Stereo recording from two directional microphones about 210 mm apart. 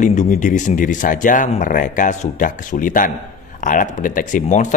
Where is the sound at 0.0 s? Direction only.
35° left (ahead or behind).